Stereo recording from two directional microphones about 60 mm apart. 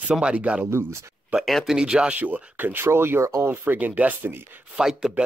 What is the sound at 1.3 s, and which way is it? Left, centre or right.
Speech, right.